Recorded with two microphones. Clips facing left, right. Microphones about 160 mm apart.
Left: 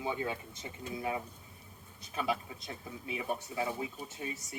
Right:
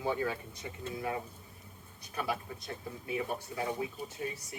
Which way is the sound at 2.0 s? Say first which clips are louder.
Left 1 dB; 20° left (ahead or behind).